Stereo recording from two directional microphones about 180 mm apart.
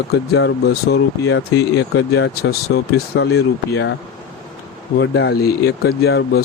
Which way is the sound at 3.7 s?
90° left.